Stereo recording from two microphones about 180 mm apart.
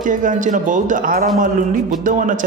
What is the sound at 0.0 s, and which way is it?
Speech, 45° right (ahead or behind).